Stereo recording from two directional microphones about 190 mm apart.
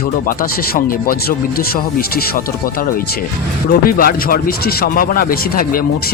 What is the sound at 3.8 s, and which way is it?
Speech, 50° left (ahead or behind).